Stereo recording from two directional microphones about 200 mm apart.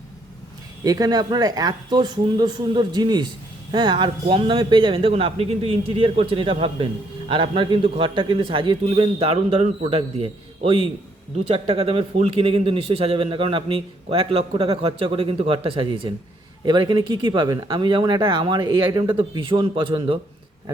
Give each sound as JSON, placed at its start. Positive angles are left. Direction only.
{"t": 0.9, "sound": "a man's voice", "side_deg": -20}